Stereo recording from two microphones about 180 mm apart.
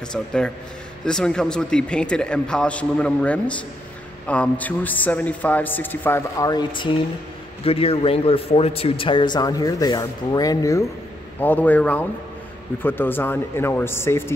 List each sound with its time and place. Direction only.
0.1 s a man's voice: 5° left (ahead or behind)